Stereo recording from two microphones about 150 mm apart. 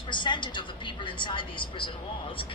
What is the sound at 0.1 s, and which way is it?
Speech, 30° left (ahead or behind).